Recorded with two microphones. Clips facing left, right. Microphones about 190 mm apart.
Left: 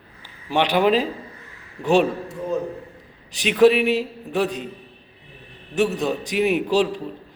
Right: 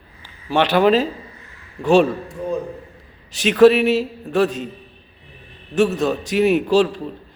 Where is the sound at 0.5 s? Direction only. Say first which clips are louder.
Right 3 dB; 15° left (ahead or behind).